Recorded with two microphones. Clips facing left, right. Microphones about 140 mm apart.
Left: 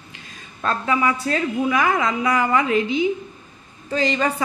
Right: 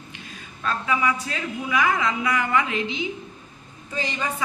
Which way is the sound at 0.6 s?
40° left (ahead or behind).